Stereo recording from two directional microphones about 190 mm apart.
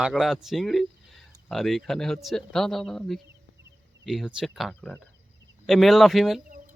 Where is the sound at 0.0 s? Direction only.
Centre (ahead or behind).